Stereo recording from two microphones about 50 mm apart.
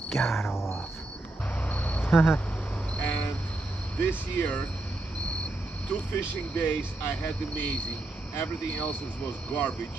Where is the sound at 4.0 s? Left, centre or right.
Left.